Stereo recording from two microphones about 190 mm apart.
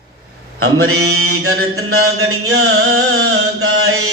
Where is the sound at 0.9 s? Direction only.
90° right.